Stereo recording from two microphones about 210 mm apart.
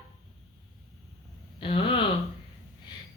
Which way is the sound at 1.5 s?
25° left (ahead or behind).